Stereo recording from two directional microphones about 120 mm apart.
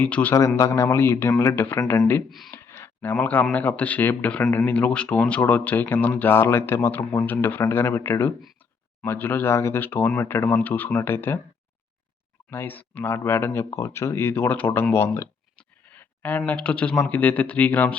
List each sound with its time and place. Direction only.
0.0 s speech: 15° left (ahead or behind)
0.3 s speech: 25° left (ahead or behind)
2.5 s a sound: 20° left (ahead or behind)
3.5 s speech: 15° left (ahead or behind)
12.5 s speech: 15° left (ahead or behind)
15.5 s a sound: 15° left (ahead or behind)
16.5 s speech: 10° left (ahead or behind)